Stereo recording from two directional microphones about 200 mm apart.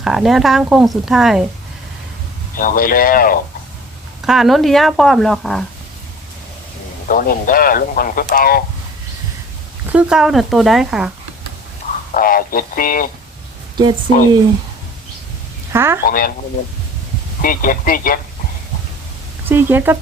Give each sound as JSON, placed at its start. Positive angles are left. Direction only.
{"t": 0.0, "sound": "speech", "side_deg": 0}
{"t": 2.6, "sound": "speech", "side_deg": 45}
{"t": 4.3, "sound": "speech", "side_deg": 0}
{"t": 7.1, "sound": "speech", "side_deg": 45}
{"t": 9.9, "sound": "speech", "side_deg": -5}
{"t": 12.1, "sound": "speech", "side_deg": 45}
{"t": 15.7, "sound": "speech", "side_deg": -10}
{"t": 16.0, "sound": "speech", "side_deg": 45}
{"t": 17.4, "sound": "speech", "side_deg": 45}
{"t": 19.5, "sound": "speech", "side_deg": -10}